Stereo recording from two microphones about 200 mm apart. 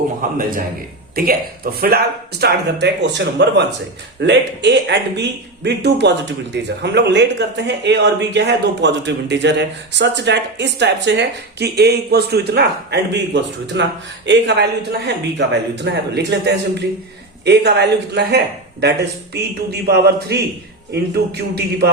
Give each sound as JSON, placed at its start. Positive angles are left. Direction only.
{"t": 0.2, "sound": "a man's voice", "side_deg": -45}